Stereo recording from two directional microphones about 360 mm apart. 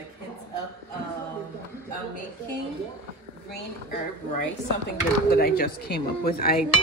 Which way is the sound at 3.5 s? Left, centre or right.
Left.